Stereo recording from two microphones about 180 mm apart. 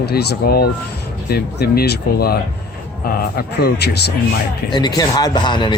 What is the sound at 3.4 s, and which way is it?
Speech, 65° left (ahead or behind).